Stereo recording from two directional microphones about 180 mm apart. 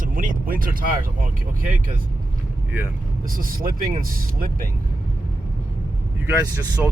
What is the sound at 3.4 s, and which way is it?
Speech, 50° right (ahead or behind).